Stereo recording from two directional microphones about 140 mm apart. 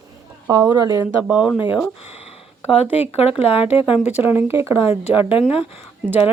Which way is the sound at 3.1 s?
45° left (ahead or behind).